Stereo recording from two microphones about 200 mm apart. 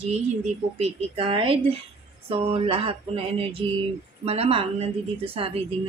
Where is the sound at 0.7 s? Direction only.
30° right (ahead or behind).